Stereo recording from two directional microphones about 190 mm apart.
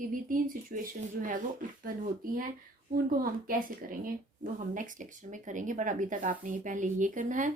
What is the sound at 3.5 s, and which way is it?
A woman's voice, 45° right (ahead or behind).